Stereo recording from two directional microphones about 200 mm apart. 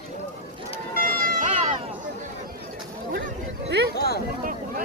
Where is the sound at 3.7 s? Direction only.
55° right (ahead or behind).